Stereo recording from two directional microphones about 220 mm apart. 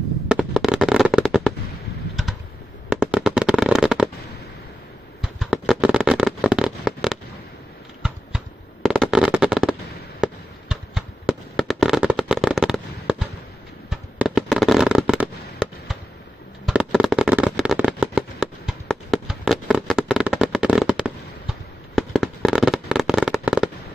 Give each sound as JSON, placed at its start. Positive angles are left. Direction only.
{"t": 0.3, "sound": "fireworks", "side_deg": -5}
{"t": 2.9, "sound": "fireworks", "side_deg": -5}
{"t": 5.2, "sound": "fireworks", "side_deg": 0}
{"t": 8.8, "sound": "fireworks", "side_deg": 0}